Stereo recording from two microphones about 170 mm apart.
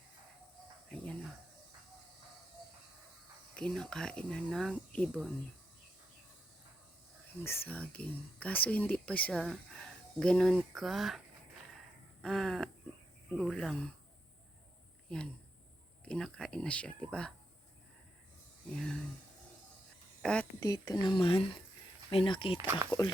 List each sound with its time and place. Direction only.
0.9 s chicken: 5° left (ahead or behind)
3.5 s speech: 5° left (ahead or behind)
7.4 s speech: 15° left (ahead or behind)
12.2 s speech: 5° left (ahead or behind)
15.1 s speech: 5° left (ahead or behind)
18.7 s speech: 5° left (ahead or behind)
20.2 s speech: 5° left (ahead or behind)
20.6 s speech: 20° left (ahead or behind)
22.6 s speech: 10° right (ahead or behind)